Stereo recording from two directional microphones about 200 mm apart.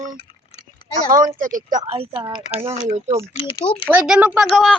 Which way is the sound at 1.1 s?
40° right (ahead or behind).